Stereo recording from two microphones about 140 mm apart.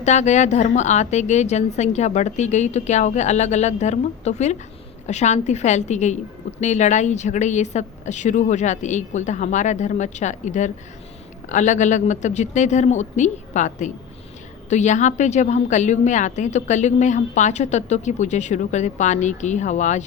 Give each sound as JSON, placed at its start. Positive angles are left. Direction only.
{"t": 0.0, "sound": "a woman's voice", "side_deg": 55}